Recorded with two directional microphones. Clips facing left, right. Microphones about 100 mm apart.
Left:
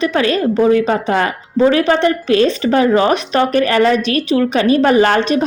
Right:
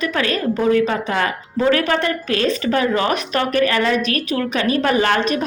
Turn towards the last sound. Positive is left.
turn(degrees=35)  # may be behind; listen again after turning